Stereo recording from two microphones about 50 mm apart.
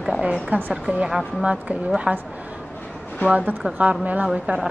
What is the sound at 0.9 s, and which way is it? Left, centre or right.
Speech, right.